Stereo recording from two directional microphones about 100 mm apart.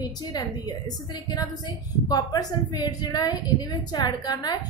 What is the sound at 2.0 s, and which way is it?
A woman's voice, 40° left (ahead or behind).